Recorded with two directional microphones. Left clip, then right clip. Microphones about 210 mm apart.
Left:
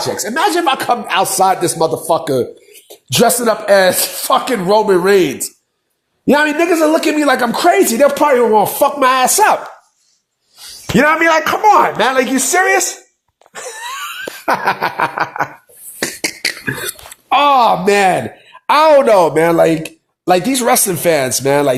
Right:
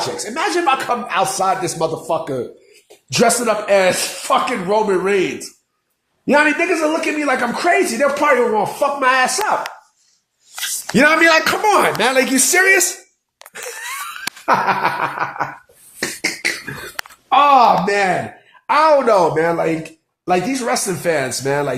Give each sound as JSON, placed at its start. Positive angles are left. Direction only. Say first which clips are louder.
{"t": 0.2, "sound": "a man's voice", "louder": "left 7 dB", "side_deg": 30}
{"t": 10.9, "sound": "a man's voice", "louder": "left 1 dB", "side_deg": 10}
{"t": 14.4, "sound": "a man's voice", "louder": "even", "side_deg": 40}
{"t": 16.0, "sound": "a sound", "louder": "left 2 dB", "side_deg": 40}
{"t": 17.2, "sound": "a man's voice", "louder": "left 1 dB", "side_deg": 35}